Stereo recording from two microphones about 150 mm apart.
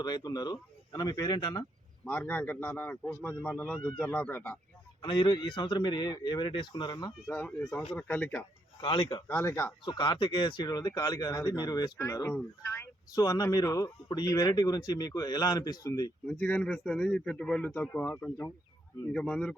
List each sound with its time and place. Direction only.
0.0 s speech: 25° left (ahead or behind)
2.0 s a man's voice: 10° left (ahead or behind)
5.0 s a man's voice: 30° left (ahead or behind)
7.3 s a man's voice: 10° left (ahead or behind)
8.8 s a man's voice: 30° left (ahead or behind)
9.2 s a man's voice: 15° left (ahead or behind)
9.8 s speech: 35° left (ahead or behind)
16.2 s a man's voice: 10° left (ahead or behind)